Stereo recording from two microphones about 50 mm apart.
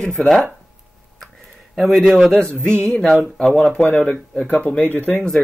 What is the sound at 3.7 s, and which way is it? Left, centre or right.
Speech, left.